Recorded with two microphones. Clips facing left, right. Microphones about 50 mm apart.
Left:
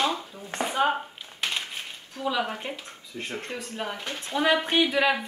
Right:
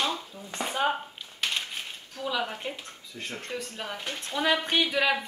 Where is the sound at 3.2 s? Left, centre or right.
Left.